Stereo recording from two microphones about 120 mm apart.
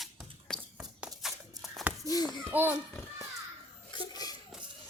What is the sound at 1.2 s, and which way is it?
Shuffling cards, centre (ahead or behind).